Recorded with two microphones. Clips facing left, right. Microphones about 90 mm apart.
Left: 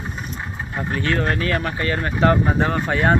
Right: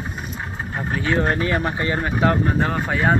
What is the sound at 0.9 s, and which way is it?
Speech, 10° right (ahead or behind).